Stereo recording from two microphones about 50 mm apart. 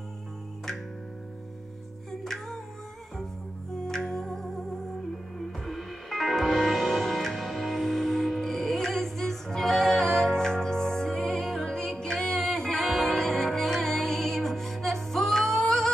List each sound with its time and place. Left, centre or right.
2.2 s music: centre
3.8 s music: centre
5.7 s music: centre